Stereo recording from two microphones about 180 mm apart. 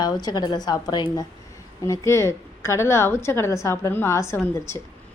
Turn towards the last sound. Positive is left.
turn(degrees=15)  # may be behind; listen again after turning